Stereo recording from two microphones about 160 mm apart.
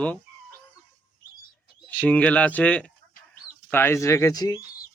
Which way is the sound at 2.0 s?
10° left (ahead or behind).